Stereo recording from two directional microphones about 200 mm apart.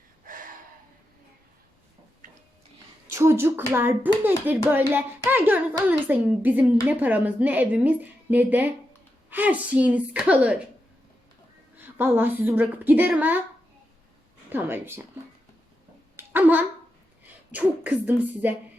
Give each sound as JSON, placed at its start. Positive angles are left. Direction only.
{"t": 0.3, "sound": "gasp", "side_deg": -45}
{"t": 3.1, "sound": "speech", "side_deg": -15}
{"t": 11.8, "sound": "speech", "side_deg": -10}
{"t": 14.5, "sound": "speech", "side_deg": -10}
{"t": 16.1, "sound": "babbling", "side_deg": -10}
{"t": 17.5, "sound": "speech", "side_deg": -10}